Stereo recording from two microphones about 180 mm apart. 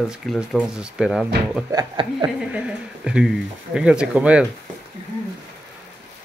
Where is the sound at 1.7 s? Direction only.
20° right (ahead or behind).